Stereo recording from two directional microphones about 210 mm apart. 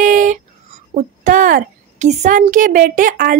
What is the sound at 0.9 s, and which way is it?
A woman's voice, 40° right (ahead or behind).